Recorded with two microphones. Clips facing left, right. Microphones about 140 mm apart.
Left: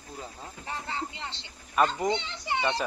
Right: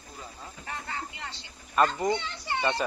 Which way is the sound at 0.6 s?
25° left (ahead or behind).